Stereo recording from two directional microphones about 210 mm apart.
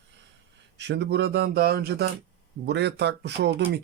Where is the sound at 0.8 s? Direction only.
55° right (ahead or behind).